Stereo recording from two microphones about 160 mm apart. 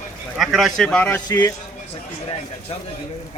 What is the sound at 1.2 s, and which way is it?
Speech, 25° left (ahead or behind).